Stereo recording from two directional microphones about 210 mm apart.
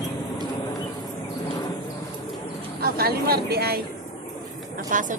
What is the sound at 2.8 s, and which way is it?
Speech, 45° right (ahead or behind).